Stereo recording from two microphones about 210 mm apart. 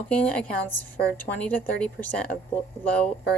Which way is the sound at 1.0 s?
50° left (ahead or behind).